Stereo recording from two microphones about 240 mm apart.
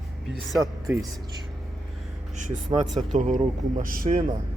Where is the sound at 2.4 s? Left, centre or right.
Right.